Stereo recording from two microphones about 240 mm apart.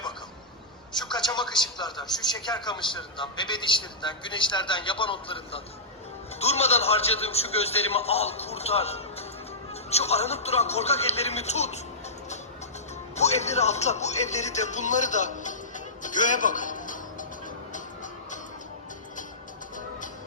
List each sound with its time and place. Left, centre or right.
1.1 s a man's voice: centre
13.1 s a man's voice: left
16.0 s music: left